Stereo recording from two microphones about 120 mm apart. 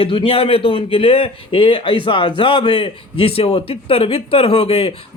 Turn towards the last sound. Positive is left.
turn(degrees=50)  # may be behind; listen again after turning